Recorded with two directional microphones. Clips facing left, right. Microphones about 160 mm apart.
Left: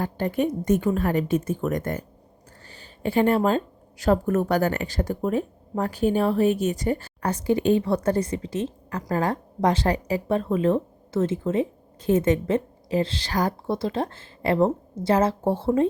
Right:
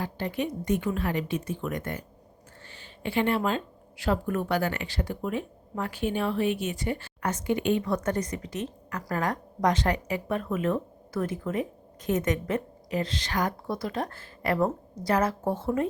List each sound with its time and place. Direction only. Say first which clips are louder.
0.0 s a woman's voice: left 6 dB; 50° left (ahead or behind); by 15.9 s 30° left (ahead or behind)